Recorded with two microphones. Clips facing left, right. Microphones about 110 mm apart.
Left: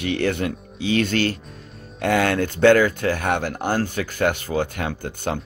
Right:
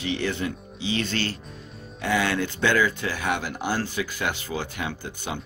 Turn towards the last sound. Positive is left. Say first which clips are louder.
# left 6 dB
turn(degrees=55)  # may be behind; listen again after turning